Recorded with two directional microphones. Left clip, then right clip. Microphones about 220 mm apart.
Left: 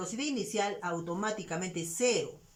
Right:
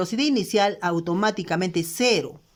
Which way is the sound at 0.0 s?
45° right (ahead or behind).